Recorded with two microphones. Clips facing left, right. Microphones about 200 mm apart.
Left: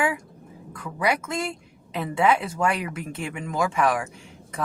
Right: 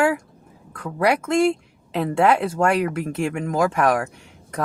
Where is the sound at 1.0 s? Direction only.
70° right (ahead or behind).